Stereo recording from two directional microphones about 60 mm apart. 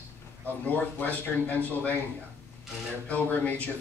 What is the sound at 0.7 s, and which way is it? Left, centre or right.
Speech, left.